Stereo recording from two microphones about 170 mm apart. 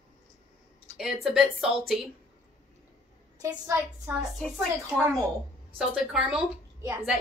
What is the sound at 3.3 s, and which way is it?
Speech, 20° right (ahead or behind).